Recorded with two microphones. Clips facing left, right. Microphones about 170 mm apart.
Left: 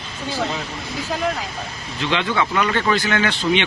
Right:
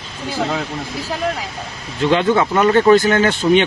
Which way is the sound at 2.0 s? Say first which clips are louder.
Right 7 dB; 45° right (ahead or behind).